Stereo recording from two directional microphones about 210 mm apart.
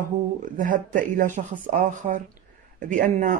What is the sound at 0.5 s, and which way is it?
Speech, 40° right (ahead or behind).